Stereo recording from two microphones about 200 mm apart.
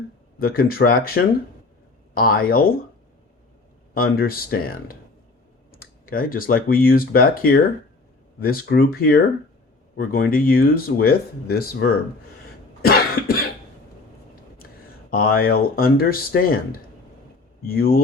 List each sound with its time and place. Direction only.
0.3 s speech: 50° left (ahead or behind)
3.9 s speech: 50° left (ahead or behind)
12.8 s cough: 50° left (ahead or behind)
15.1 s speech: 45° left (ahead or behind)